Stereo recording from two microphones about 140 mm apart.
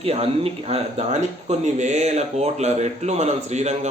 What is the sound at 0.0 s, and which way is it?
Speech, 45° right (ahead or behind).